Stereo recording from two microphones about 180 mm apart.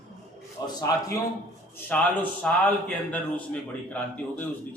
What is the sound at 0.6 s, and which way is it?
Speech, 20° left (ahead or behind).